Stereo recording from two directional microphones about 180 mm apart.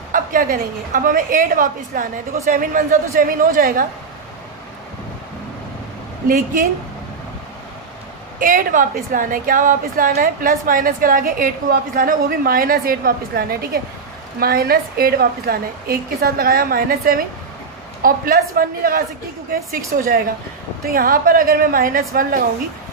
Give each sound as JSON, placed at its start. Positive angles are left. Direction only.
{"t": 0.1, "sound": "a woman's voice", "side_deg": -50}
{"t": 6.2, "sound": "a woman's voice", "side_deg": -50}
{"t": 8.4, "sound": "a woman's voice", "side_deg": -45}